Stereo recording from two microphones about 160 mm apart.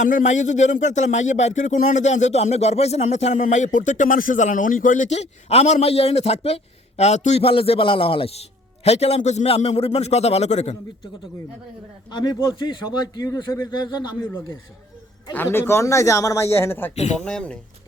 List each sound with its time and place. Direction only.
0.0 s speech: 55° left (ahead or behind)
12.1 s a man's voice: 25° left (ahead or behind)
15.4 s speech: 15° left (ahead or behind)
16.9 s speech: 45° left (ahead or behind)
17.2 s speech: 5° left (ahead or behind)